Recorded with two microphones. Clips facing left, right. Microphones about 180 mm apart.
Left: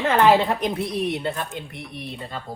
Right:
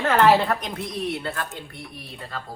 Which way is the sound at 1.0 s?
20° left (ahead or behind).